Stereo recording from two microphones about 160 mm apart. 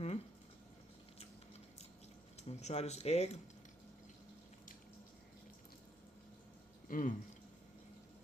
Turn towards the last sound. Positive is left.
turn(degrees=60)  # may be behind; listen again after turning